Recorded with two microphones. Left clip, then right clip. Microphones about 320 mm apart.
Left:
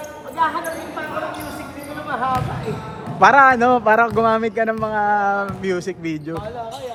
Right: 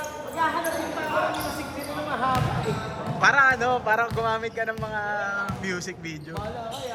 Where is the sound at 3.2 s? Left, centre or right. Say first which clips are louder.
Left 8 dB; centre.